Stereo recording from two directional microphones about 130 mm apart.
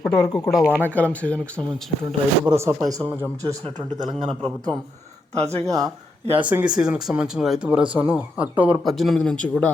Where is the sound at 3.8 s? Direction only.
40° right (ahead or behind).